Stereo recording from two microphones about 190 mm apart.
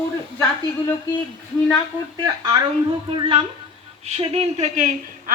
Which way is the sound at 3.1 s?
30° right (ahead or behind).